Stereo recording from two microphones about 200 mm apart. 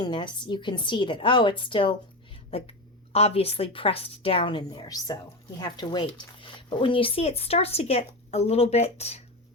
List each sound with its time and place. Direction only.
0.0 s a woman's voice: 20° left (ahead or behind)